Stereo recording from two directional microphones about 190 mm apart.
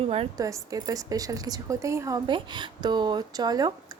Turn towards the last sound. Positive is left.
turn(degrees=-20)  # may be behind; listen again after turning